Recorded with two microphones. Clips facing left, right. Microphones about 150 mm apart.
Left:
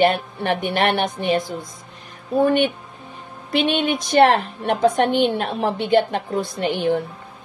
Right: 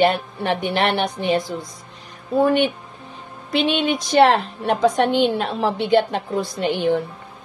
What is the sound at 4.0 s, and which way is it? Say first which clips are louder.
A woman's voice: even; 55° left (ahead or behind).